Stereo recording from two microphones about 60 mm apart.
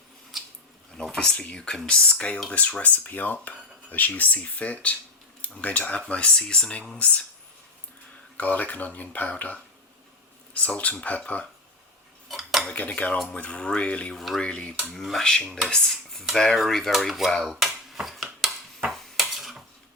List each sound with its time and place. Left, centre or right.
1.1 s speech: centre
8.4 s speech: left
12.3 s cutlery: centre
12.6 s speech: centre
14.2 s cutlery: centre
14.4 s speech: centre
14.8 s cutlery: centre
15.9 s cutlery: centre
17.4 s finger snapping: centre
18.9 s dishes: centre